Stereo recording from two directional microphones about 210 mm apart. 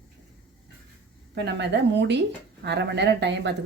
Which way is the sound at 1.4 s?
55° right (ahead or behind).